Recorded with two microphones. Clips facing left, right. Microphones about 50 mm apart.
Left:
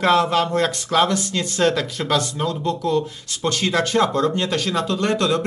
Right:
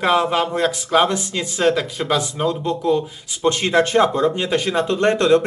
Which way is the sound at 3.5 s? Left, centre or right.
Right.